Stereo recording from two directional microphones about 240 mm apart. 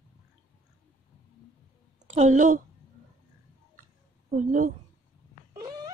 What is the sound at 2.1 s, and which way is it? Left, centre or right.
Speech, right.